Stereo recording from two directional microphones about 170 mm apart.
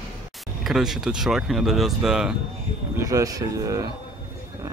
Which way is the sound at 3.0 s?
20° right (ahead or behind).